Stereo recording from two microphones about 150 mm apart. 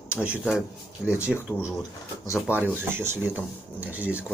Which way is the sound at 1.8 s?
20° left (ahead or behind).